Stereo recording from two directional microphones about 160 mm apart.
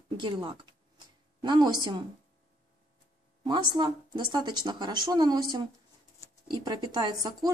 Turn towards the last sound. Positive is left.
turn(degrees=-25)  # may be behind; listen again after turning